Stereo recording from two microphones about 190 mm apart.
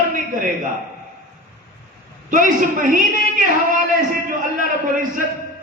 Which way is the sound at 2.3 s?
45° right (ahead or behind).